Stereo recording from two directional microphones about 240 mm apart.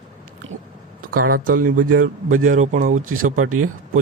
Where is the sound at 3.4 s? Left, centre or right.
Right.